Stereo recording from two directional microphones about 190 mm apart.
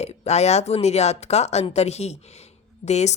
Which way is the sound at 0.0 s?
35° left (ahead or behind).